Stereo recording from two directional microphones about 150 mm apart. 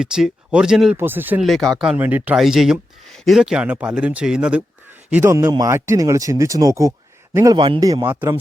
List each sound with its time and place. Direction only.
0.0 s speech: 5° right (ahead or behind)
1.5 s speech: centre (ahead or behind); by 8.4 s 15° right (ahead or behind)